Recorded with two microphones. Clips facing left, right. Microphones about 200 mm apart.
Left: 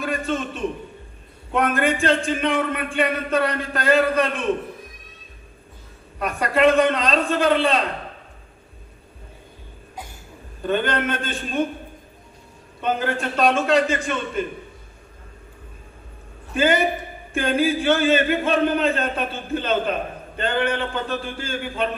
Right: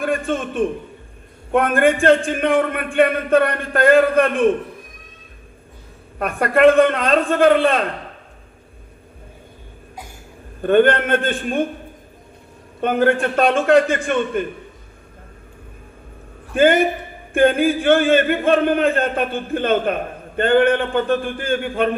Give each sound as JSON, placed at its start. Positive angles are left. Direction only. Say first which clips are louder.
{"t": 0.0, "sound": "a man's voice", "louder": "right 4 dB", "side_deg": -55}
{"t": 6.1, "sound": "a man's voice", "louder": "right 4 dB", "side_deg": -55}
{"t": 10.6, "sound": "a man's voice", "louder": "right 8 dB", "side_deg": -55}
{"t": 12.8, "sound": "a man's voice", "louder": "right 7 dB", "side_deg": -55}
{"t": 16.6, "sound": "a man's voice", "louder": "right 5 dB", "side_deg": -55}